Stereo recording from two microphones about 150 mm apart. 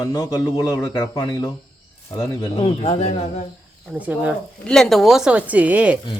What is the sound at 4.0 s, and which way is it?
Speech, 10° right (ahead or behind).